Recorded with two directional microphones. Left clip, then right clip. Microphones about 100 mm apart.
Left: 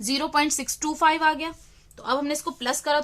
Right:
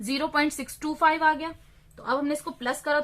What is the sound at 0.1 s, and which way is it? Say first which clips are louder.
Speech: left 2 dB; 15° left (ahead or behind).